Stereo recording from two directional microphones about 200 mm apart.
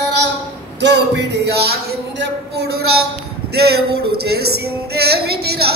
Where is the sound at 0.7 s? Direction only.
55° right (ahead or behind).